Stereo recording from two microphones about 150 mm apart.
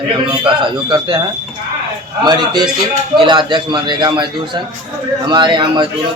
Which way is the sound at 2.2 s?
30° right (ahead or behind).